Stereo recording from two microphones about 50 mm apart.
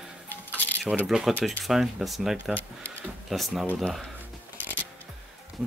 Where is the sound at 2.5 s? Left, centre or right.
Left.